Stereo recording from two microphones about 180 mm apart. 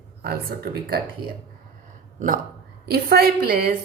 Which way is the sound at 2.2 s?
50° right (ahead or behind).